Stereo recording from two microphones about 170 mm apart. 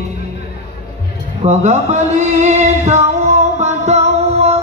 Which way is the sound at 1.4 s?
45° right (ahead or behind).